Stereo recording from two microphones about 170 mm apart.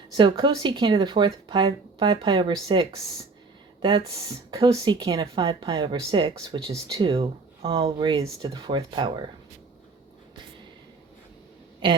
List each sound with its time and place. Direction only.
0.1 s speech: 30° right (ahead or behind)
11.8 s speech: 30° right (ahead or behind)